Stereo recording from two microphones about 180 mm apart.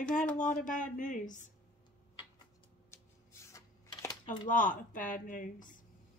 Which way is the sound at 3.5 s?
15° left (ahead or behind).